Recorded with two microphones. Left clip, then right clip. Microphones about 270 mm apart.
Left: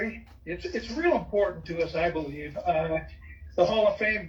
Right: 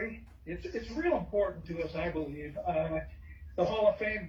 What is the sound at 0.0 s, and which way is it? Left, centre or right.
Speech, left.